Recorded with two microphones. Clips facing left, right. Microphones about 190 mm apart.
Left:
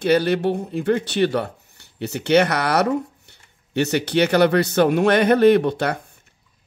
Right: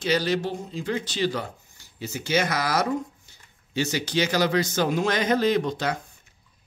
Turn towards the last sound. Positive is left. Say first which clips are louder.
# left 6 dB
turn(degrees=60)  # may be behind; listen again after turning